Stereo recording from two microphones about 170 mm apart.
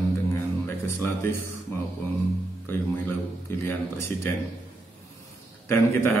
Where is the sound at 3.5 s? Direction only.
15° left (ahead or behind).